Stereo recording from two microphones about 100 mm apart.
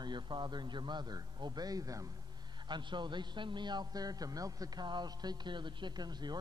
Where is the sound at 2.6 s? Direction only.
50° right (ahead or behind).